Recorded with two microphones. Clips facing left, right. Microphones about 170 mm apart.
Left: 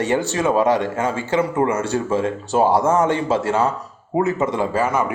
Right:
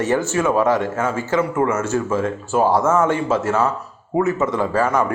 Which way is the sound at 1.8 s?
30° left (ahead or behind).